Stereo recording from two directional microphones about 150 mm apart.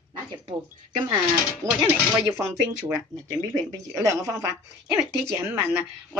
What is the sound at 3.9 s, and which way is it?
Speech, 20° right (ahead or behind).